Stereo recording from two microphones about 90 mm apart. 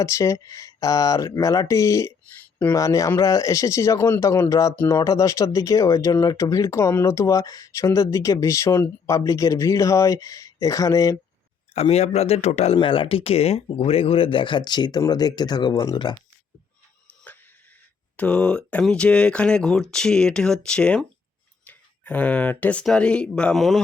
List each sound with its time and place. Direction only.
0.0 s speech: 35° left (ahead or behind)
12.7 s speech: 75° left (ahead or behind); by 16.1 s 50° left (ahead or behind)
18.2 s speech: 15° left (ahead or behind)
23.6 s a man's voice: centre (ahead or behind)